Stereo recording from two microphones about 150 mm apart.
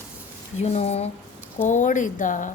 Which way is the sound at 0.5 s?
45° left (ahead or behind).